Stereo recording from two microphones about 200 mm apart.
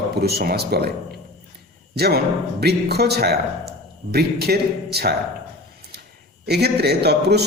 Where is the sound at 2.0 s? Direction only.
55° right (ahead or behind).